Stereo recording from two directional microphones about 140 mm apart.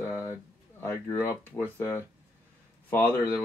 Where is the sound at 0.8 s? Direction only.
15° left (ahead or behind).